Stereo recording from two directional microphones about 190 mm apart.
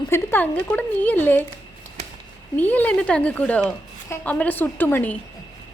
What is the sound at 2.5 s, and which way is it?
A woman's voice, 10° left (ahead or behind).